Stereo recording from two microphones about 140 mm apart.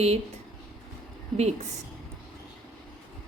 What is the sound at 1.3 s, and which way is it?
Speech, 50° right (ahead or behind).